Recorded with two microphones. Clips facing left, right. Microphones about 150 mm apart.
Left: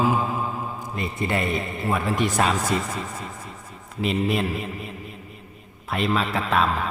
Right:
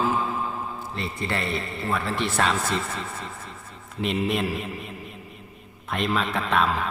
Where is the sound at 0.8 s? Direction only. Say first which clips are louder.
Left 2 dB; 15° left (ahead or behind).